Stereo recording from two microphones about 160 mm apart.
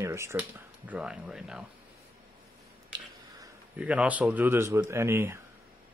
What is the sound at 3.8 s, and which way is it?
Speech, 5° right (ahead or behind).